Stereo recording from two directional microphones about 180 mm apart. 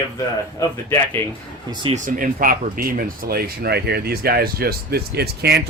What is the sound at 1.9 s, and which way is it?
Speech, 50° right (ahead or behind).